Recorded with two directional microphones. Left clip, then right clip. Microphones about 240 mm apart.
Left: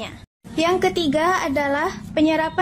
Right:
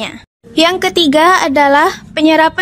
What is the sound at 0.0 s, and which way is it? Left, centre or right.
A woman's voice, right.